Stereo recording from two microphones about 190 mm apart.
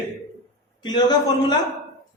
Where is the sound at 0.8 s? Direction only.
20° left (ahead or behind).